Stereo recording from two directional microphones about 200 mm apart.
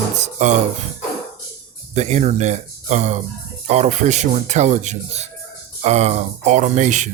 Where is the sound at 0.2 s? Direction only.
35° right (ahead or behind).